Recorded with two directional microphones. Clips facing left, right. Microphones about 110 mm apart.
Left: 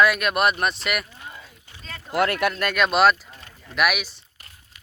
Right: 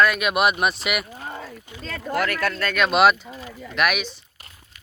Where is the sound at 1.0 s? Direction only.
45° right (ahead or behind).